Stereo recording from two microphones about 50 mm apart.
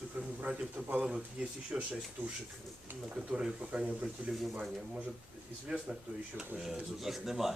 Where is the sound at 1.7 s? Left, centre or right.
Centre.